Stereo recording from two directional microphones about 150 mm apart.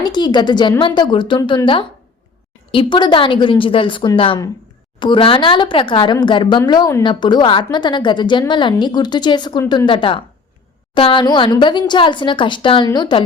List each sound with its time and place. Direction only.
0.0 s a woman's voice: 30° left (ahead or behind)